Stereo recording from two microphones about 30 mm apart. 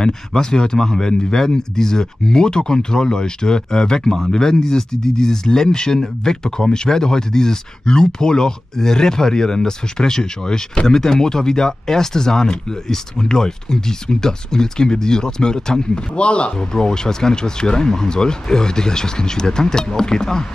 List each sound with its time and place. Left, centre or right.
0.0 s speech: left
16.2 s speech: left
16.5 s speech: left